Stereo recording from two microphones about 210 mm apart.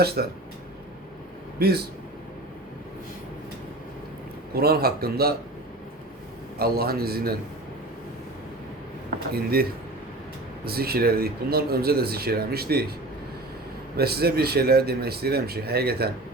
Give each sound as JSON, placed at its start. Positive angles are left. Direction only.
{"t": 0.2, "sound": "speech", "side_deg": -45}
{"t": 1.5, "sound": "a man's voice", "side_deg": -50}
{"t": 4.5, "sound": "speech", "side_deg": -45}
{"t": 6.6, "sound": "speech", "side_deg": -45}
{"t": 9.3, "sound": "speech", "side_deg": -45}
{"t": 10.7, "sound": "speech", "side_deg": -45}
{"t": 13.9, "sound": "speech", "side_deg": -50}